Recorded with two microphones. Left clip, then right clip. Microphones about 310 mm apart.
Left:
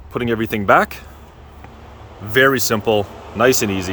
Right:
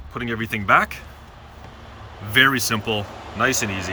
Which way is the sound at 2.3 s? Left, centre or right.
Centre.